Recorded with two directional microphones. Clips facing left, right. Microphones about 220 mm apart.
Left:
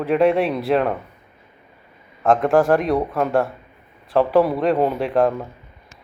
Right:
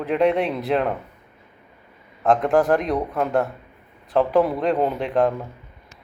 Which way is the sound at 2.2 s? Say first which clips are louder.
Left 2 dB; 20° right (ahead or behind).